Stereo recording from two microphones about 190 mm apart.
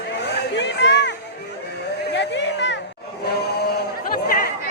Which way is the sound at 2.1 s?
70° left (ahead or behind).